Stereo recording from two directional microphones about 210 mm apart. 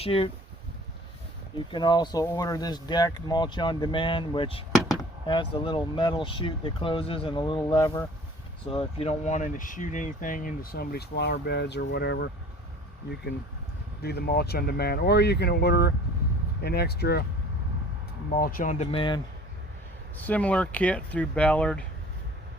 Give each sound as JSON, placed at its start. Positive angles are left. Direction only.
{"t": 0.0, "sound": "speech", "side_deg": 25}
{"t": 1.5, "sound": "speech", "side_deg": 20}
{"t": 14.0, "sound": "speech", "side_deg": 50}
{"t": 18.3, "sound": "speech", "side_deg": 40}
{"t": 20.1, "sound": "speech", "side_deg": 10}